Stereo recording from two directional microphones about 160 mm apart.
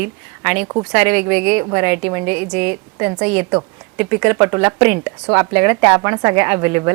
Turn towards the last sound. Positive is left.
turn(degrees=-10)  # may be behind; listen again after turning